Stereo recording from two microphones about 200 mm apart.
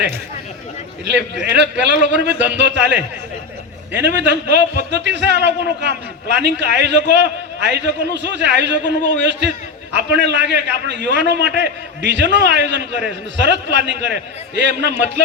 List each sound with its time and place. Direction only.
1.0 s a man's voice: 60° right (ahead or behind)
9.9 s a man's voice: 60° right (ahead or behind)